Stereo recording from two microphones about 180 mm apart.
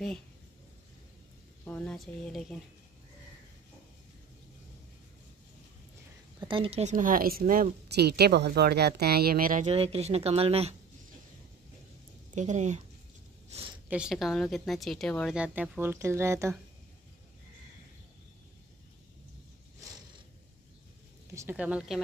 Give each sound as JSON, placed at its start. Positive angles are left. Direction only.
{"t": 1.6, "sound": "speech", "side_deg": 10}
{"t": 6.4, "sound": "speech", "side_deg": -30}
{"t": 9.7, "sound": "speech", "side_deg": -35}
{"t": 12.4, "sound": "speech", "side_deg": -40}
{"t": 13.5, "sound": "a sound", "side_deg": -30}
{"t": 13.8, "sound": "speech", "side_deg": -5}
{"t": 15.3, "sound": "speech", "side_deg": -5}
{"t": 21.4, "sound": "speech", "side_deg": -10}